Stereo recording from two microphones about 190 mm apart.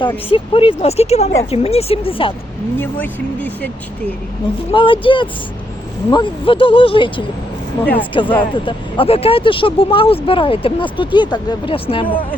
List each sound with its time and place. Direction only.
0.3 s speech: 30° left (ahead or behind)
2.7 s speech: 10° left (ahead or behind)
4.7 s speech: 25° left (ahead or behind)